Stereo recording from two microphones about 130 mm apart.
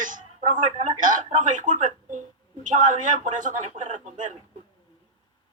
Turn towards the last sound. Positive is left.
turn(degrees=-75)  # may be behind; listen again after turning